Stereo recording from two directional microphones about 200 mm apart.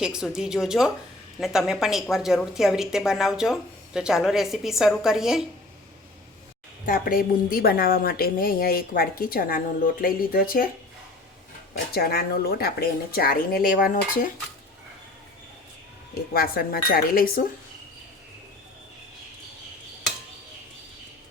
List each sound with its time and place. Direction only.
0.0 s a woman's voice: 5° right (ahead or behind)
6.8 s a woman's voice: 45° left (ahead or behind)
11.9 s a woman's voice: 50° left (ahead or behind)
16.3 s a woman's voice: 50° left (ahead or behind)